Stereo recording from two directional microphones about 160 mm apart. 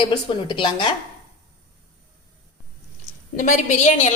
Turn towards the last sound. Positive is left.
turn(degrees=50)  # may be behind; listen again after turning